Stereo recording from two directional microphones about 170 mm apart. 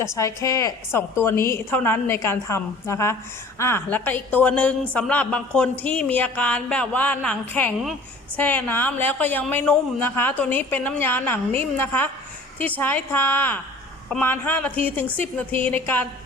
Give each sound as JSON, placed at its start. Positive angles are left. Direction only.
{"t": 0.2, "sound": "a woman's voice", "side_deg": 20}